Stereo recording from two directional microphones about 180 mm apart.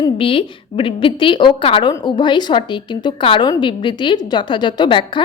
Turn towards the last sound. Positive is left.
turn(degrees=25)  # may be behind; listen again after turning